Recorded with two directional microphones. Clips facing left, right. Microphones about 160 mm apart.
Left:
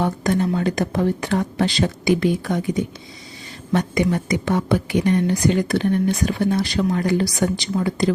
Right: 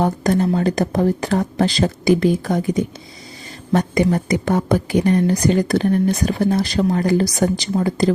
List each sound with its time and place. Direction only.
0.0 s a woman's voice: 35° right (ahead or behind)